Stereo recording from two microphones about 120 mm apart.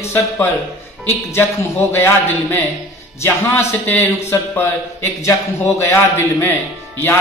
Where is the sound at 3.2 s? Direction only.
20° left (ahead or behind).